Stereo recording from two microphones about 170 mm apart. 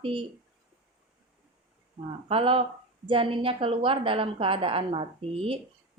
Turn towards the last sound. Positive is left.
turn(degrees=-35)  # may be behind; listen again after turning